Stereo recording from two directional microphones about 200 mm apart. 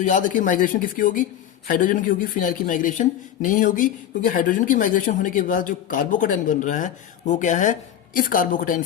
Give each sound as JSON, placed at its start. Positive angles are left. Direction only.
{"t": 0.0, "sound": "speech", "side_deg": 40}